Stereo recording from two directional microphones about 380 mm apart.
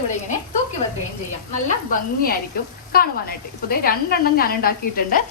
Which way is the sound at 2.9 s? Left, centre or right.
Left.